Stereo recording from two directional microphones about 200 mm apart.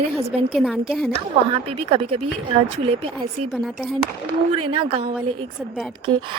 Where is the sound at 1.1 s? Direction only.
30° right (ahead or behind).